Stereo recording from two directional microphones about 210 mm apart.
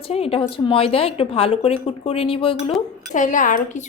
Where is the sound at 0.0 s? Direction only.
25° left (ahead or behind).